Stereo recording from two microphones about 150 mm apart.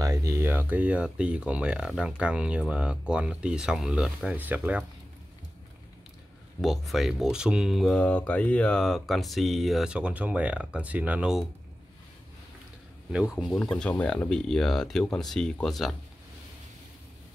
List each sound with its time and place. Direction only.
0.0 s speech: 20° right (ahead or behind)
6.6 s speech: centre (ahead or behind)
13.1 s speech: 5° right (ahead or behind)
13.5 s speech: 5° left (ahead or behind)